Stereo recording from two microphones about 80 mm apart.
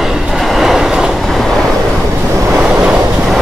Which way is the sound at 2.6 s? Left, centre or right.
Centre.